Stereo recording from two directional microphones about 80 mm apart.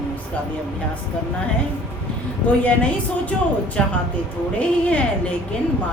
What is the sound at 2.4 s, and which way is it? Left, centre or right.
Speech, centre.